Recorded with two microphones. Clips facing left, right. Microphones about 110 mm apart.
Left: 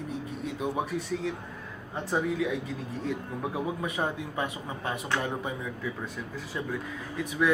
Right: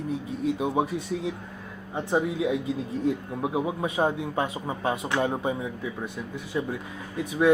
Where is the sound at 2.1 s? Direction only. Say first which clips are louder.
Right 3 dB; 20° right (ahead or behind).